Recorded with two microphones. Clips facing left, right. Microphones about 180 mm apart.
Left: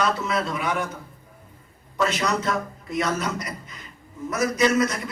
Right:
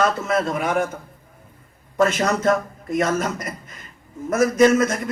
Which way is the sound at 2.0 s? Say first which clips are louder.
Right 5 dB; 50° right (ahead or behind).